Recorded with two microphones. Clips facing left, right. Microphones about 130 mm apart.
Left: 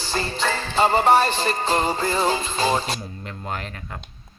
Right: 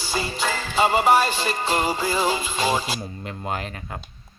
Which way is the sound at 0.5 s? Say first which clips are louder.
Left 1 dB; 35° left (ahead or behind).